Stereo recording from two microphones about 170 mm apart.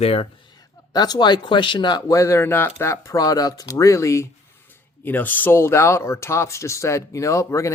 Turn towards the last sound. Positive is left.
turn(degrees=20)  # may be behind; listen again after turning